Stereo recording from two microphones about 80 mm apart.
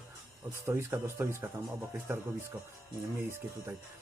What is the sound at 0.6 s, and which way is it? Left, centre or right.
Speech, right.